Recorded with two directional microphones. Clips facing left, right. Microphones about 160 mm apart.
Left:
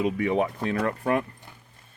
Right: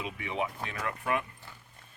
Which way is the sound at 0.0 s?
45° left (ahead or behind).